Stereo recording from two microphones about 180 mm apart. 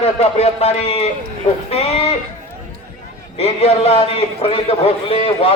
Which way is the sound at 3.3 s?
35° left (ahead or behind).